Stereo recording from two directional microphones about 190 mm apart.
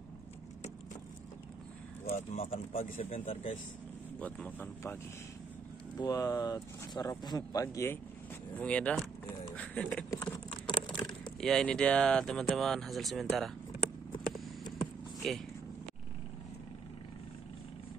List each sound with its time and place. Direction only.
2.0 s speech: 35° left (ahead or behind)
4.2 s speech: 10° left (ahead or behind)
5.9 s speech: 20° left (ahead or behind)
10.7 s a sound: 25° left (ahead or behind)
11.4 s speech: 5° left (ahead or behind)
15.2 s speech: centre (ahead or behind)